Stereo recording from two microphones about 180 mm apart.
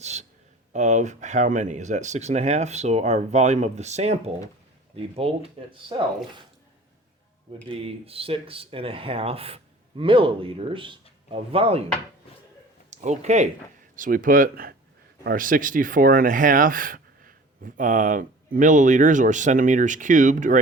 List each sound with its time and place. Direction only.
0.0 s a sound: 40° right (ahead or behind)
0.7 s speech: 40° right (ahead or behind)
7.9 s speech: 30° right (ahead or behind)
12.9 s speech: 40° right (ahead or behind)